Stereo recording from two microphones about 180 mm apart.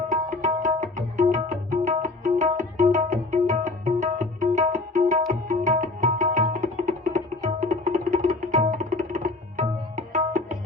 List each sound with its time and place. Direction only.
0.1 s music: 45° right (ahead or behind)